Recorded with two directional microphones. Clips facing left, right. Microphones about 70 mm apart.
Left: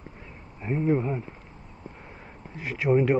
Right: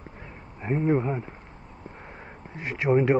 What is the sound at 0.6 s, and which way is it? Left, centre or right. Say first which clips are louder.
Speech: right 1 dB; right.